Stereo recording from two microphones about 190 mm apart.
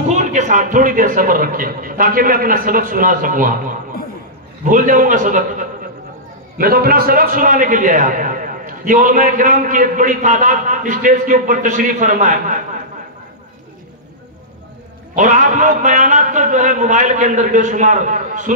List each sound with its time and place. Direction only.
0.1 s a man's voice: 40° right (ahead or behind)
15.1 s a man's voice: 40° right (ahead or behind)